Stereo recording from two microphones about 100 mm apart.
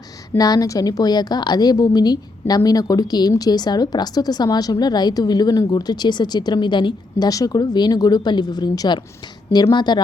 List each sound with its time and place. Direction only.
0.3 s a woman's voice: 40° left (ahead or behind)